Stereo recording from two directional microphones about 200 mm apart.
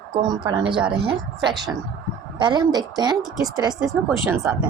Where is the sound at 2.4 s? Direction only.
20° right (ahead or behind).